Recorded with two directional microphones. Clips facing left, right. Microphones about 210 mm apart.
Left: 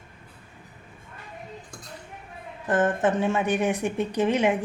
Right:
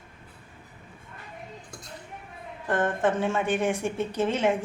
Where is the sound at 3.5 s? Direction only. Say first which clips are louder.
Left 2 dB; 15° left (ahead or behind).